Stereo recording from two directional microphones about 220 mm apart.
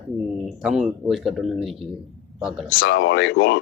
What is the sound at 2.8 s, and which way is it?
Speech, 50° left (ahead or behind).